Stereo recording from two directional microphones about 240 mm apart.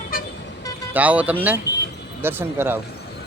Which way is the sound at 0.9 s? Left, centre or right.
Centre.